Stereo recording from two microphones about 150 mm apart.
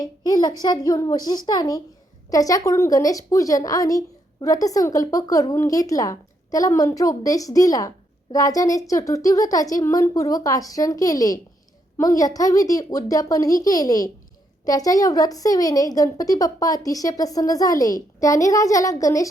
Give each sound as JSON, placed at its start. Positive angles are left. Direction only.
{"t": 0.0, "sound": "a woman's voice", "side_deg": 25}